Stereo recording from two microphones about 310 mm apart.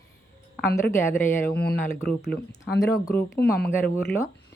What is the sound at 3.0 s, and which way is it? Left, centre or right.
Speech, centre.